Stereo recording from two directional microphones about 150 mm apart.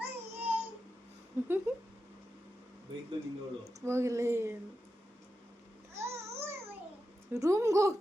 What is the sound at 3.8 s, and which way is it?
Speech, 20° right (ahead or behind).